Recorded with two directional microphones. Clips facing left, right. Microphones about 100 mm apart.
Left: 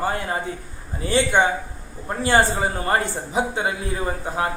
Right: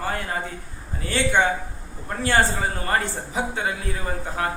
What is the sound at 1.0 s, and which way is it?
A man's voice, 20° left (ahead or behind).